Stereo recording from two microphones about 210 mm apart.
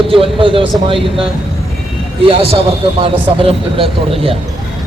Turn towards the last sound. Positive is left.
turn(degrees=-25)  # may be behind; listen again after turning